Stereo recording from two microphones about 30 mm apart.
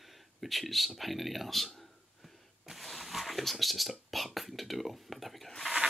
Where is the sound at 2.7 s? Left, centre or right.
Centre.